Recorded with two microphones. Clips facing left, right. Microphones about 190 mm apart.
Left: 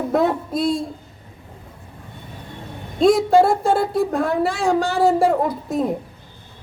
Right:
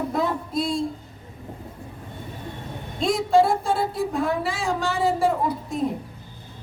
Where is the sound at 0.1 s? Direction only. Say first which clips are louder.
Left 10 dB; 60° left (ahead or behind).